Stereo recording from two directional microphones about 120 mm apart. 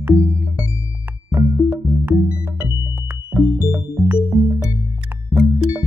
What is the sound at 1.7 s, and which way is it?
Music, 20° right (ahead or behind).